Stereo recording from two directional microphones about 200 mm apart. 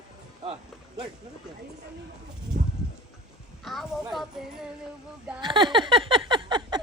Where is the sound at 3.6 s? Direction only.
Centre (ahead or behind).